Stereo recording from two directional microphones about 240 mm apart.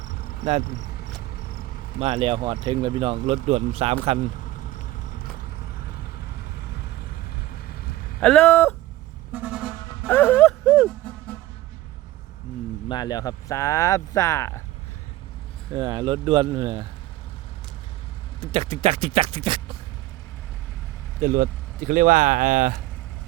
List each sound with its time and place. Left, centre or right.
0.0 s cricket: left
0.6 s speech: left
1.2 s vehicle: left
2.0 s speech: right
4.4 s vehicle: left
8.2 s speech: centre
9.3 s music: centre
10.1 s music: centre
12.9 s speech: centre
15.7 s speech: centre
18.3 s speech: right
21.2 s speech: right